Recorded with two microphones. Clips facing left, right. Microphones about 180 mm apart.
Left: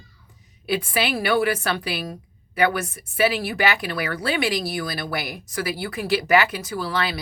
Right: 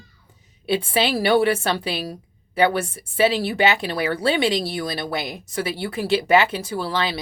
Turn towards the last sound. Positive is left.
turn(degrees=-25)  # may be behind; listen again after turning